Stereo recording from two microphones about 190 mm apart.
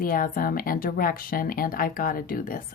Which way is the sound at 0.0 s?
50° left (ahead or behind).